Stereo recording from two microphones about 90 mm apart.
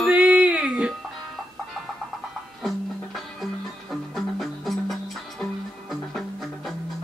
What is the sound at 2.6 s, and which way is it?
Music, centre (ahead or behind).